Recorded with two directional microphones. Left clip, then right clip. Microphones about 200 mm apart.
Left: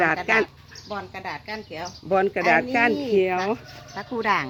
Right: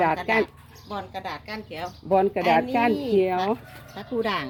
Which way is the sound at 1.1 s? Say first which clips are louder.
Even; 40° left (ahead or behind).